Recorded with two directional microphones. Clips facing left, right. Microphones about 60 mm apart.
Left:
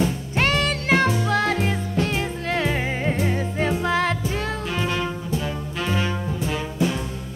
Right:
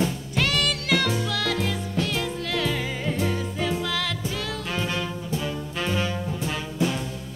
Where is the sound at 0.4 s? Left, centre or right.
Left.